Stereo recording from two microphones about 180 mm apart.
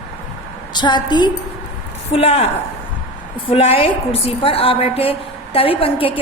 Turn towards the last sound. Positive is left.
turn(degrees=30)  # may be behind; listen again after turning